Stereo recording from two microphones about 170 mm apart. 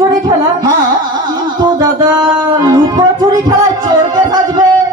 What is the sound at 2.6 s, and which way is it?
Music, 25° right (ahead or behind).